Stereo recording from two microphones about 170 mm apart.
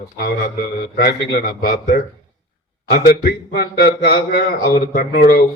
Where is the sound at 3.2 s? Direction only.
60° left (ahead or behind).